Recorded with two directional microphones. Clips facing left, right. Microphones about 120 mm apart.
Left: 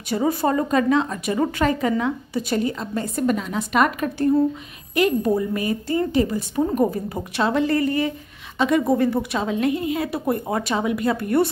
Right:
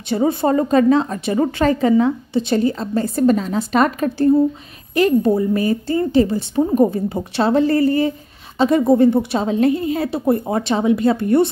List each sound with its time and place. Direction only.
0.1 s a woman's voice: 25° right (ahead or behind)